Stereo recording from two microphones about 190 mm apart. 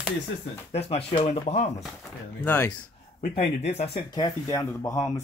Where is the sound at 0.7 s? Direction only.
30° left (ahead or behind).